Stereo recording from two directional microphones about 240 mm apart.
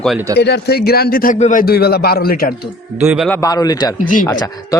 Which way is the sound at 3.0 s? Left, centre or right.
Centre.